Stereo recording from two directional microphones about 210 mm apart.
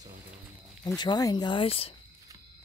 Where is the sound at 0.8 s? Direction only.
20° left (ahead or behind).